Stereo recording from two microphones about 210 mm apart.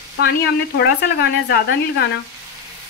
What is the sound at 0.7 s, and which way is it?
Frying, 50° left (ahead or behind).